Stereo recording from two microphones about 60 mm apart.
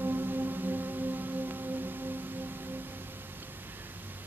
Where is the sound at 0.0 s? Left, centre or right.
Right.